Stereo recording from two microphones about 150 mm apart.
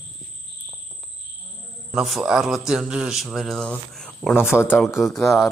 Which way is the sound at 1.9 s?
Centre (ahead or behind).